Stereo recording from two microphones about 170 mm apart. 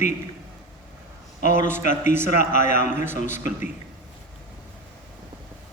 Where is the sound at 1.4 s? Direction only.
50° left (ahead or behind).